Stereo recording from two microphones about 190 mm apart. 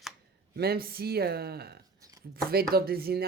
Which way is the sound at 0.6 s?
55° right (ahead or behind).